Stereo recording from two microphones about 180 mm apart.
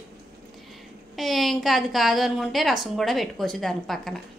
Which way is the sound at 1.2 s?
Centre (ahead or behind).